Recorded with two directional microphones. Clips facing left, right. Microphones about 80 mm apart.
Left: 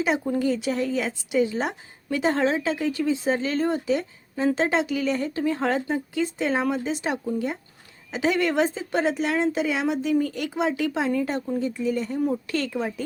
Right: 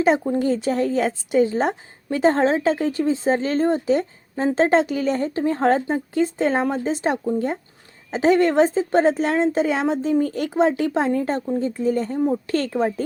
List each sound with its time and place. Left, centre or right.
0.0 s speech: right
12.2 s speech: right
12.5 s speech: right